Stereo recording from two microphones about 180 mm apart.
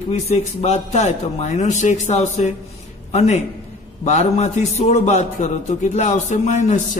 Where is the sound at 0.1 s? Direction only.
40° left (ahead or behind).